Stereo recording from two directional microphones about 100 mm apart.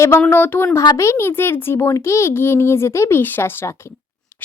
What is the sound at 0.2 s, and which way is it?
A child's voice, 20° left (ahead or behind).